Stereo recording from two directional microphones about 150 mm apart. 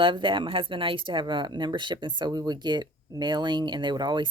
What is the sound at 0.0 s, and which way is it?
Speech, 35° right (ahead or behind).